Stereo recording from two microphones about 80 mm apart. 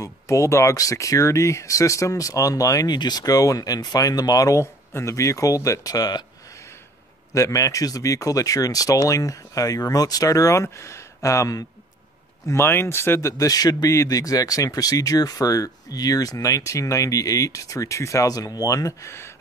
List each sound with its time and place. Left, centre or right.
0.0 s speech: left
2.9 s speech: left
7.3 s speech: left
12.4 s speech: left
13.4 s speech: left